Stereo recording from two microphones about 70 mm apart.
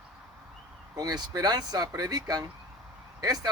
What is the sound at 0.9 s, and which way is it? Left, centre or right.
Speech, right.